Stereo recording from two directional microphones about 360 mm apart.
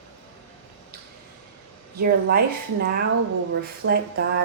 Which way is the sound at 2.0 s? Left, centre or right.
Right.